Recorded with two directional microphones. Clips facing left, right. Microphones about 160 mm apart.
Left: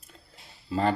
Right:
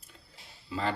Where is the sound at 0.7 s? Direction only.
45° left (ahead or behind).